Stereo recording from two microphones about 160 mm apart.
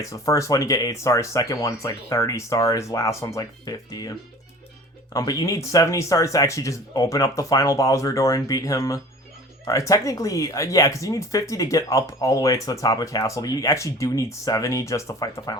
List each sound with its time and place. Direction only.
0.0 s speech: 20° left (ahead or behind)
5.1 s speech: 20° left (ahead or behind)